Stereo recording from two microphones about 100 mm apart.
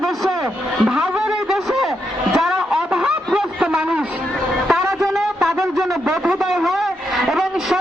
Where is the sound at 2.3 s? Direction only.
5° right (ahead or behind).